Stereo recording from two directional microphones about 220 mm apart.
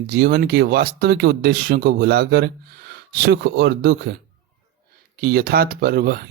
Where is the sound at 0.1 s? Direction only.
45° right (ahead or behind).